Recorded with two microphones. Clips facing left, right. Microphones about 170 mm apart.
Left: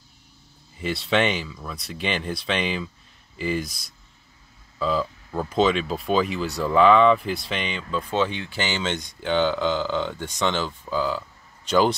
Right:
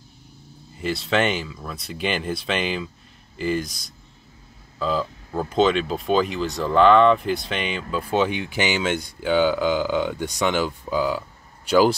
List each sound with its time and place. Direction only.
0.7 s speech: centre (ahead or behind)